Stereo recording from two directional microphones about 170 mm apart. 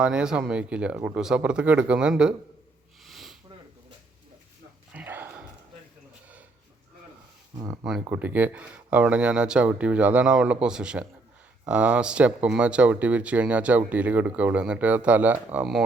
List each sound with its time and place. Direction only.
0.0 s speech: 5° right (ahead or behind)
3.0 s sniff: centre (ahead or behind)
4.9 s a sound: 10° right (ahead or behind)
7.5 s speech: 20° right (ahead or behind)
8.1 s speech: 10° right (ahead or behind)